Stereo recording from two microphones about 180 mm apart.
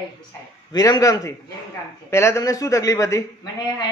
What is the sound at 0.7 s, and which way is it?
A woman's voice, 20° left (ahead or behind).